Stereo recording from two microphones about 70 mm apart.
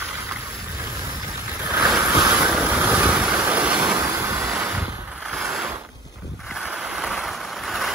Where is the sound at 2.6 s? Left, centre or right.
Right.